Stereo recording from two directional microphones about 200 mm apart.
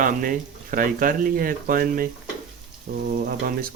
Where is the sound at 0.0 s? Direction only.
40° right (ahead or behind).